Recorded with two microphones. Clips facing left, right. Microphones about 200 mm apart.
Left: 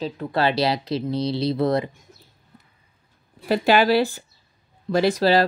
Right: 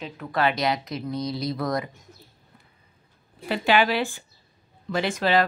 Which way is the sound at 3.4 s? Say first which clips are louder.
Left 4 dB; 40° left (ahead or behind).